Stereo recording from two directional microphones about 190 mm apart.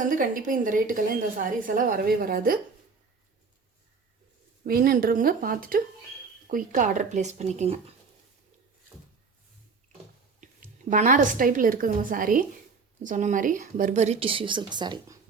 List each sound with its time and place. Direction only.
0.0 s a woman's voice: 45° right (ahead or behind)
4.6 s a woman's voice: 50° right (ahead or behind)
10.4 s a woman's voice: 40° right (ahead or behind); by 15.2 s 20° right (ahead or behind)